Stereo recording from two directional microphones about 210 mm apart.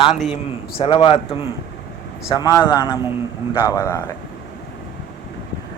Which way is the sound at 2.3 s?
15° left (ahead or behind).